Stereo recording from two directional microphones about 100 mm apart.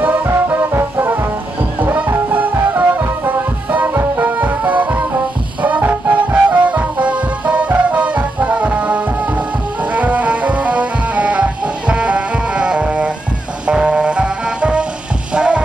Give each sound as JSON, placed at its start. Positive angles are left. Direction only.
{"t": 0.0, "sound": "music", "side_deg": -20}